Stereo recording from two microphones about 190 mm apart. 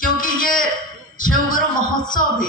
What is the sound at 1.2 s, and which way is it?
Speech, 45° left (ahead or behind).